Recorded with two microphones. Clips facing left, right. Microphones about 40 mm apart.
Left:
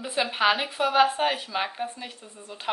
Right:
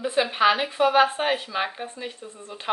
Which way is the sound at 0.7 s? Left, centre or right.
Centre.